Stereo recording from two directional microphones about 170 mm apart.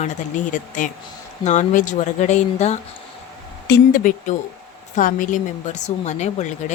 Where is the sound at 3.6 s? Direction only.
60° left (ahead or behind); by 6.5 s 45° left (ahead or behind).